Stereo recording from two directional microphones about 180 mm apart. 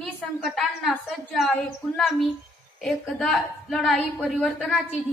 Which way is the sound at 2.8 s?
Centre (ahead or behind).